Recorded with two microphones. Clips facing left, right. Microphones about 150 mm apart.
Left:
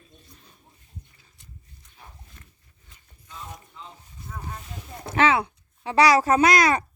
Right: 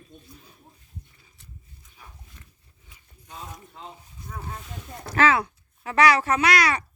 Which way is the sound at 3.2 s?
60° right (ahead or behind).